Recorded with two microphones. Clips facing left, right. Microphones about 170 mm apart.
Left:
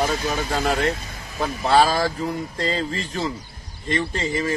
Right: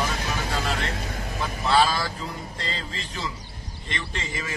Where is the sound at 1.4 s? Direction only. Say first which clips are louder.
Left 4 dB; 45° left (ahead or behind).